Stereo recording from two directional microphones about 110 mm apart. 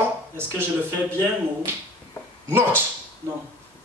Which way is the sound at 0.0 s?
20° right (ahead or behind).